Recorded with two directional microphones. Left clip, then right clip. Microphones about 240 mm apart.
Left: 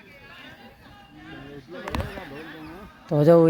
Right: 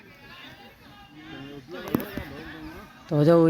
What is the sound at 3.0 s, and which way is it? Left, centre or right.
Speech, centre.